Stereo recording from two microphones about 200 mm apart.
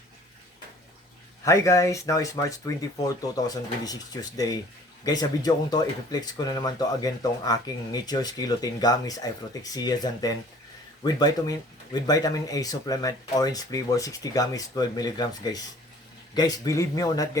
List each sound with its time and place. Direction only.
1.5 s speech: 15° left (ahead or behind)